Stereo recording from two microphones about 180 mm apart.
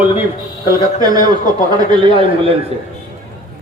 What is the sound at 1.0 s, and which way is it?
A man's voice, 20° right (ahead or behind).